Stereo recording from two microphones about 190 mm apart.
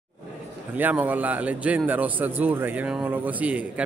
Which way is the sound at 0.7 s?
10° right (ahead or behind).